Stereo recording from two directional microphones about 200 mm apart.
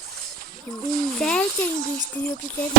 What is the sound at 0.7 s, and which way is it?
Speech, 15° left (ahead or behind).